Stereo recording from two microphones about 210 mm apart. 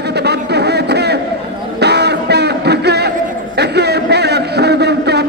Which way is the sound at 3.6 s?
50° right (ahead or behind).